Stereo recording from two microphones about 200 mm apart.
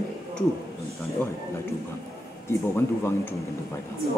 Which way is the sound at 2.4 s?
10° left (ahead or behind).